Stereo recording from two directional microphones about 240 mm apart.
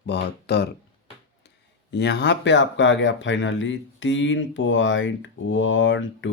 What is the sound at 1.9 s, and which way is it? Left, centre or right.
Speech, left.